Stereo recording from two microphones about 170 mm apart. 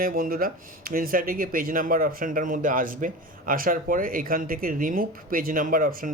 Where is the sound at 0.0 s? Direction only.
60° right (ahead or behind).